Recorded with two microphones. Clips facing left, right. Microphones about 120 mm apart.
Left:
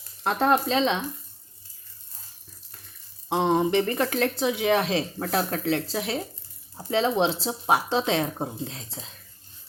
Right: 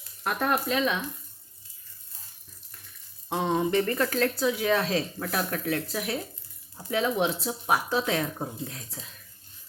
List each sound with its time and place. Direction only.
0.2 s speech: 30° left (ahead or behind)
3.2 s speech: 25° left (ahead or behind)